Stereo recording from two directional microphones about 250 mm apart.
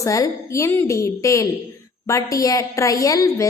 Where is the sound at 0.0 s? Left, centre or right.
Centre.